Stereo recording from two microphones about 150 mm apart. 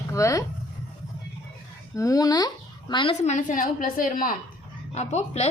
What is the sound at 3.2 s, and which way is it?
A woman's voice, 55° left (ahead or behind).